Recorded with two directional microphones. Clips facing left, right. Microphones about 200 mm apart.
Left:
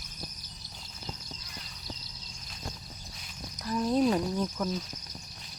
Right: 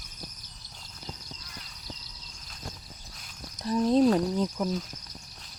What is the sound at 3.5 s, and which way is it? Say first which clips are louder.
Speech: right 4 dB; 25° right (ahead or behind).